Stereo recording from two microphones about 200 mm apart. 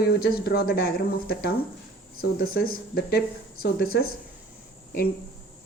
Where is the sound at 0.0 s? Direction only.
50° left (ahead or behind).